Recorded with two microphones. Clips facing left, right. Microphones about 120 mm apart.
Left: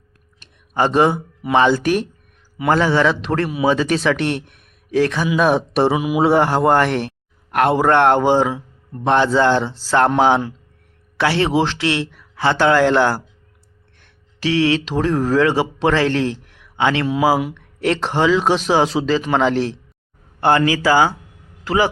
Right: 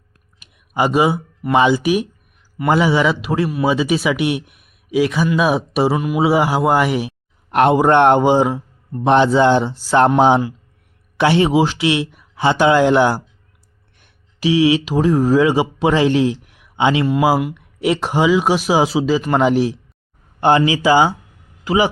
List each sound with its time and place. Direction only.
0.3 s a sound: 10° right (ahead or behind)
1.5 s a man's voice: 10° right (ahead or behind)
7.5 s a man's voice: 20° right (ahead or behind)